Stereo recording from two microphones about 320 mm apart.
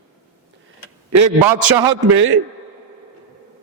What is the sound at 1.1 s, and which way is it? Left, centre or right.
Speech, right.